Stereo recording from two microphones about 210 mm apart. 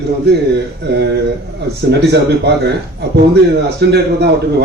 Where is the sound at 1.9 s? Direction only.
55° right (ahead or behind).